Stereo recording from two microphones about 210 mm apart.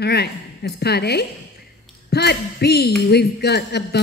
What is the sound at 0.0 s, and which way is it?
Speech, 50° left (ahead or behind).